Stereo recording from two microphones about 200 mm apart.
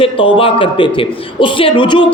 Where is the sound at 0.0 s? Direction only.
25° left (ahead or behind).